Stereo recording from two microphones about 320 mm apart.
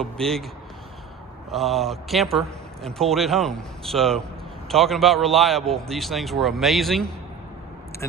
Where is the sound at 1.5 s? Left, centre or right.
Centre.